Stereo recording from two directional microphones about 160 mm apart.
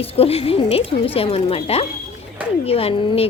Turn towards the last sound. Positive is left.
turn(degrees=40)  # may be behind; listen again after turning